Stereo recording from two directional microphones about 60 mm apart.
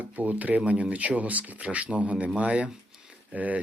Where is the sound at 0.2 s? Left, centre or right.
Right.